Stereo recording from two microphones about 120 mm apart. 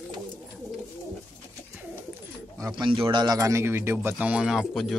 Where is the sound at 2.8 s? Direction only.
45° right (ahead or behind).